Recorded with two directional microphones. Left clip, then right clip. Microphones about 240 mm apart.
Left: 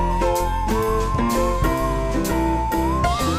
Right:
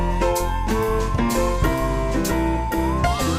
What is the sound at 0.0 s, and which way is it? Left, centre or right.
Music, centre.